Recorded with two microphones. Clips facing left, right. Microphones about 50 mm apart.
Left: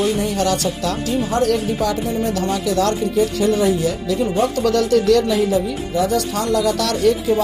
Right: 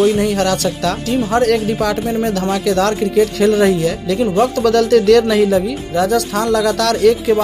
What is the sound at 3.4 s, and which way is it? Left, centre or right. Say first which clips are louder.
Speech: right 4 dB; right.